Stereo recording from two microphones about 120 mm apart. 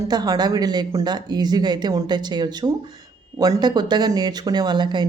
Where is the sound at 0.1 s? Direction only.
35° right (ahead or behind).